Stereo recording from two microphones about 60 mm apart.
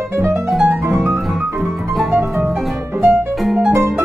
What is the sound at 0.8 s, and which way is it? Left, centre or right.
Music, right.